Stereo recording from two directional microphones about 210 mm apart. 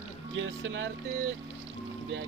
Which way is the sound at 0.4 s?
65° right (ahead or behind).